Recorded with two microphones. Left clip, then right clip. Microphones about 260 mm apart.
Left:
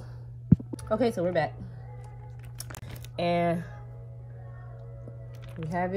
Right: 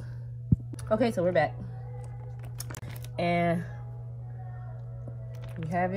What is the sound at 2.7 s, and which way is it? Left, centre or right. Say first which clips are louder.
Music: right 1 dB; centre.